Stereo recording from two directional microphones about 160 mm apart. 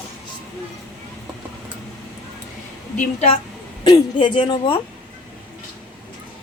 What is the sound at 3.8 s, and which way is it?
Speech, 30° left (ahead or behind).